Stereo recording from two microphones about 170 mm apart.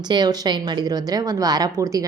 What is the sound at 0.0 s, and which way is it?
A woman's voice, 25° right (ahead or behind).